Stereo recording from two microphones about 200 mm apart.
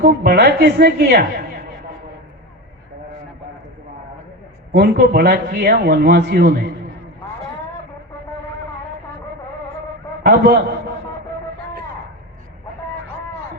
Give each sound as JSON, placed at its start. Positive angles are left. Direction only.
{"t": 0.0, "sound": "speech", "side_deg": -50}
{"t": 4.7, "sound": "speech", "side_deg": -50}
{"t": 10.2, "sound": "speech", "side_deg": -55}